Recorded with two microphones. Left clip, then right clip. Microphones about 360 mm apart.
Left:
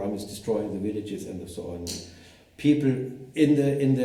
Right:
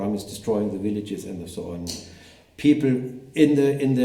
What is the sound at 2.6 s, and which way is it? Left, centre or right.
A man's voice, right.